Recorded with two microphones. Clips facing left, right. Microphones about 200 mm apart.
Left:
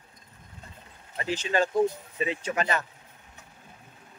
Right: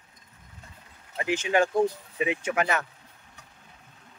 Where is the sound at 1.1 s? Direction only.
15° right (ahead or behind).